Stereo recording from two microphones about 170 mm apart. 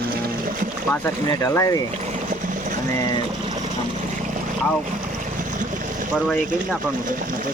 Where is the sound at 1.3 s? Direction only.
20° left (ahead or behind).